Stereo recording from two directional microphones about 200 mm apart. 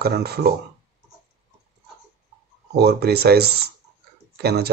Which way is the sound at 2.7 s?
55° right (ahead or behind).